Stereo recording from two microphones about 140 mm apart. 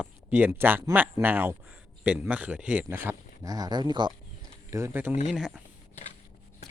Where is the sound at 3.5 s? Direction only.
30° right (ahead or behind).